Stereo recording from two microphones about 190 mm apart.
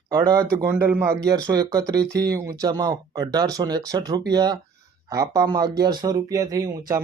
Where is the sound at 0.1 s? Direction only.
20° right (ahead or behind).